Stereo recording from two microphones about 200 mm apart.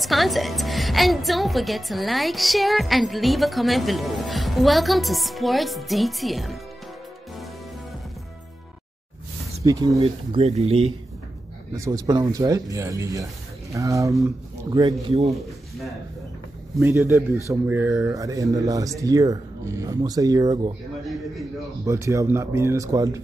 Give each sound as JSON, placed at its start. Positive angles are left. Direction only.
{"t": 0.0, "sound": "a woman's voice", "side_deg": 0}
{"t": 9.7, "sound": "speech", "side_deg": -20}
{"t": 11.7, "sound": "speech", "side_deg": -15}
{"t": 16.7, "sound": "speech", "side_deg": -15}
{"t": 21.0, "sound": "a woman's voice", "side_deg": 0}
{"t": 21.8, "sound": "speech", "side_deg": -15}